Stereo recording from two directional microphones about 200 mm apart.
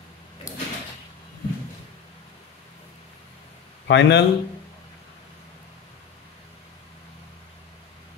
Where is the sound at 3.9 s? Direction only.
60° left (ahead or behind).